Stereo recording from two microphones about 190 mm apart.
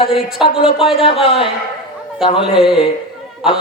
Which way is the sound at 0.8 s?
30° left (ahead or behind).